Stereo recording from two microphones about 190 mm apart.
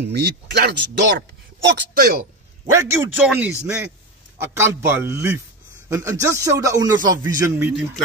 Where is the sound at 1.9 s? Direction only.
50° right (ahead or behind).